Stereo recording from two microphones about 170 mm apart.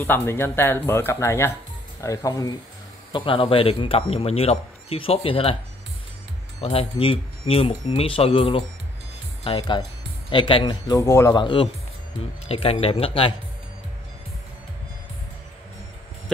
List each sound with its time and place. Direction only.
0.0 s speech: 10° left (ahead or behind); by 5.6 s 30° left (ahead or behind)
6.6 s speech: 35° left (ahead or behind)